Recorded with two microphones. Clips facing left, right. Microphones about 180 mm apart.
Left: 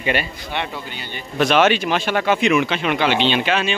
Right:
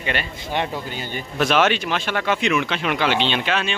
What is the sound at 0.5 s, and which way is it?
Speech, 40° right (ahead or behind).